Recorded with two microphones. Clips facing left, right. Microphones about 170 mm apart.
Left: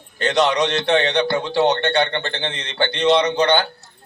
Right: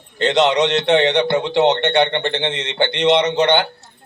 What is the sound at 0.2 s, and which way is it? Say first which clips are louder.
A man's voice: right 3 dB; 25° right (ahead or behind).